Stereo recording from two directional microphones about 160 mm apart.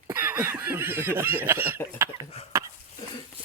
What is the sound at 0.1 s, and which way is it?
Speech, 15° right (ahead or behind).